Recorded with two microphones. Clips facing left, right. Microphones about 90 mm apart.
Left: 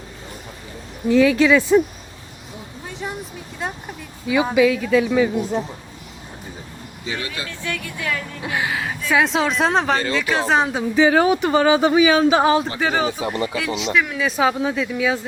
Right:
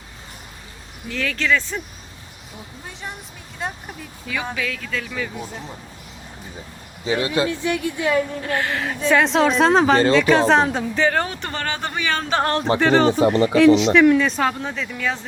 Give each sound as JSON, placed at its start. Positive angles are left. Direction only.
{"t": 1.0, "sound": "speech", "side_deg": 15}
{"t": 3.6, "sound": "speech", "side_deg": 0}
{"t": 4.3, "sound": "speech", "side_deg": 10}
{"t": 7.0, "sound": "speech", "side_deg": -30}
{"t": 8.4, "sound": "speech", "side_deg": 10}